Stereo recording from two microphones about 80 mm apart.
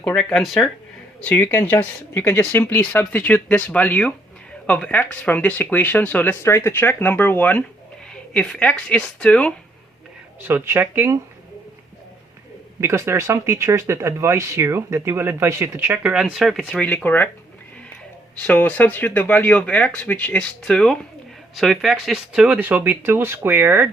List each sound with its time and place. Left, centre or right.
0.2 s speech: centre
1.2 s speech: left
8.1 s speech: centre
10.4 s speech: right
12.8 s speech: right
16.0 s speech: centre
16.7 s speech: centre
18.3 s speech: centre
22.5 s speech: right